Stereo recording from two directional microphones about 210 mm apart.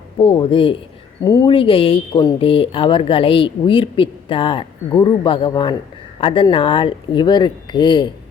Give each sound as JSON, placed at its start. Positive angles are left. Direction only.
{"t": 0.2, "sound": "speech", "side_deg": 25}